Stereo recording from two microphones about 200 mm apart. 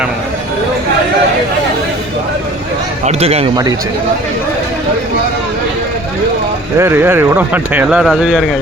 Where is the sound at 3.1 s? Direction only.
30° right (ahead or behind).